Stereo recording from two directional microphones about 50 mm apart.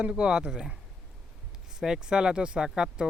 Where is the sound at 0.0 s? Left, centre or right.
Centre.